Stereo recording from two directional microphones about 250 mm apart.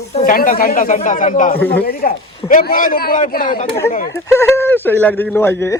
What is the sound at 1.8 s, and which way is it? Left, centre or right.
A man's voice, left.